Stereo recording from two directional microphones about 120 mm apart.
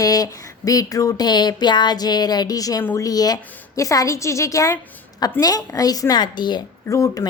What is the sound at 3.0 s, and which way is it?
A woman's voice, 30° left (ahead or behind).